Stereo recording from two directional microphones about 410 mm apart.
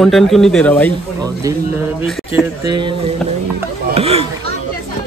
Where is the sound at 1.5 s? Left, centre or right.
Centre.